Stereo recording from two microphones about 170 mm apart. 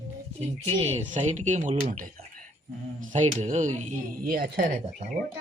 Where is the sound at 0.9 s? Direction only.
45° right (ahead or behind).